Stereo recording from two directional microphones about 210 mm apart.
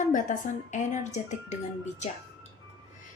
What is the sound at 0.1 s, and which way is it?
A woman's voice, 35° left (ahead or behind).